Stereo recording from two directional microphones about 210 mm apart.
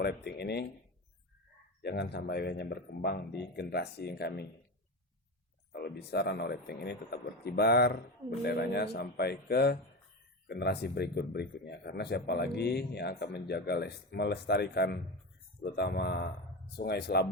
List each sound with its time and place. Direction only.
0.0 s speech: 50° left (ahead or behind)
1.8 s speech: 50° left (ahead or behind)
5.7 s speech: 50° left (ahead or behind)